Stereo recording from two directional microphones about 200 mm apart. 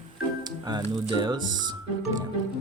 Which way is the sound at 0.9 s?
20° right (ahead or behind).